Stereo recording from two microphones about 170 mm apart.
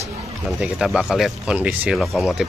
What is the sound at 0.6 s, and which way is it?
Speech, 5° right (ahead or behind).